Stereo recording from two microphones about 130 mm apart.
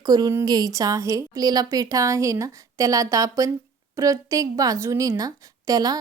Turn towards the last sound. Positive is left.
turn(degrees=-30)  # may be behind; listen again after turning